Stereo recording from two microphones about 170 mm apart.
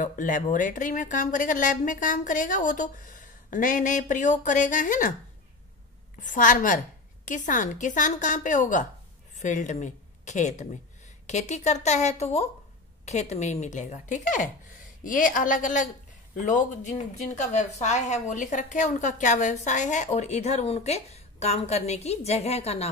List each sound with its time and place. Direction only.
0.0 s a woman's voice: 50° left (ahead or behind)
6.2 s a woman's voice: 50° left (ahead or behind)